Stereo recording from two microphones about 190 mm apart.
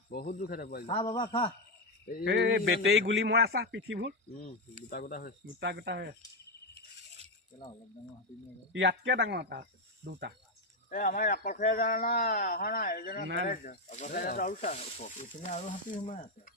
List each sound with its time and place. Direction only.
0.1 s speech: 45° left (ahead or behind)
1.0 s speech: 25° left (ahead or behind)
2.2 s speech: 65° right (ahead or behind); by 3.0 s 90° right
3.1 s speech: 65° right (ahead or behind)
4.9 s speech: 50° left (ahead or behind)
5.5 s speech: 65° right (ahead or behind)
7.6 s speech: 20° left (ahead or behind)
8.7 s speech: 70° right (ahead or behind)
10.8 s speech: 45° left (ahead or behind)